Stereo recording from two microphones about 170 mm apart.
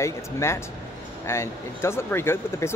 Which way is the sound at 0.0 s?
15° left (ahead or behind).